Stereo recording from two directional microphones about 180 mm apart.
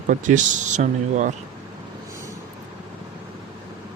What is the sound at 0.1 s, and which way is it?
Speech, 45° right (ahead or behind).